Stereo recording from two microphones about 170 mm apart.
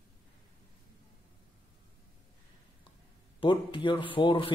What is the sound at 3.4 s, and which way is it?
Speech, 30° left (ahead or behind).